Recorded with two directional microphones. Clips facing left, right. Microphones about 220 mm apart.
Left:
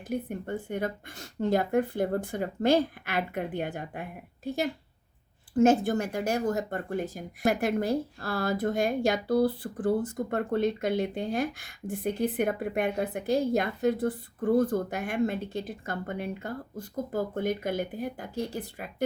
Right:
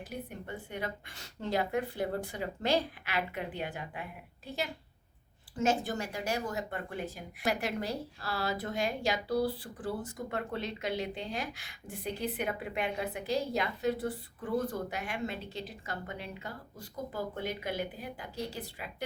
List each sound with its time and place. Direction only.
0.1 s speech: 50° left (ahead or behind)
5.5 s speech: 55° left (ahead or behind)